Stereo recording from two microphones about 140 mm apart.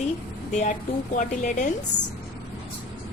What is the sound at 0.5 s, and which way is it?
Speech, 60° left (ahead or behind).